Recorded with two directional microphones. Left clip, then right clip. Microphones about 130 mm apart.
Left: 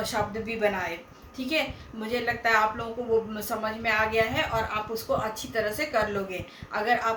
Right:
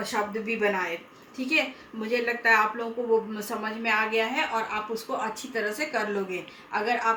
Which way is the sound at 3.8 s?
20° left (ahead or behind).